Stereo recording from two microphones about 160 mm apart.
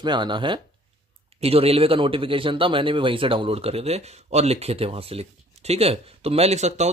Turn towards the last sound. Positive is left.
turn(degrees=-45)  # may be behind; listen again after turning